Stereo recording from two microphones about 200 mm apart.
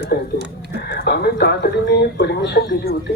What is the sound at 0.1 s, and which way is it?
Speech, 50° left (ahead or behind).